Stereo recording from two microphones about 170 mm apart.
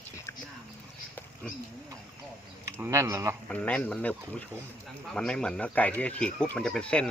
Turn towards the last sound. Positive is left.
turn(degrees=5)  # may be behind; listen again after turning